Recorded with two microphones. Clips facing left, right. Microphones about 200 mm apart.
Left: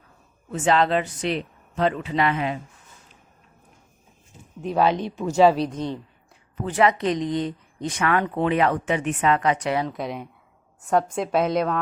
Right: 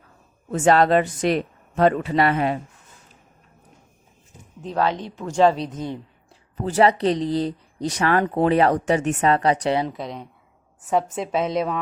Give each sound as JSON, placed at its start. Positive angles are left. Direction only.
{"t": 0.5, "sound": "speech", "side_deg": -45}
{"t": 4.6, "sound": "speech", "side_deg": 10}
{"t": 6.6, "sound": "speech", "side_deg": -35}
{"t": 9.9, "sound": "a woman's voice", "side_deg": 5}